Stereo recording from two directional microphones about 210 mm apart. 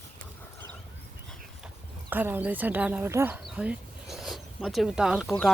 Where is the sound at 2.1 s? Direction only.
10° right (ahead or behind).